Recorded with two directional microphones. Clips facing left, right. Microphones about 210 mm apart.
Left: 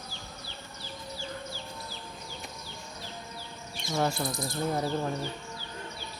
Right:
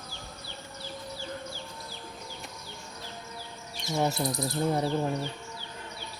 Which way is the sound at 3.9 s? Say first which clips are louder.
Right 1 dB; 15° right (ahead or behind).